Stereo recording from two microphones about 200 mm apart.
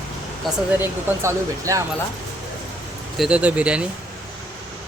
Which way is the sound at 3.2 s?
5° right (ahead or behind).